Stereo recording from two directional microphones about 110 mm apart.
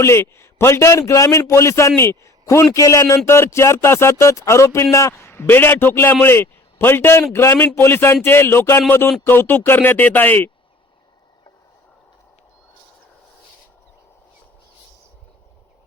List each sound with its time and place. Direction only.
0.0 s a man's voice: 25° left (ahead or behind)